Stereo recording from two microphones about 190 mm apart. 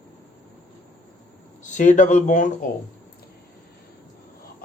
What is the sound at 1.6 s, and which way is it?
Speech, 40° left (ahead or behind).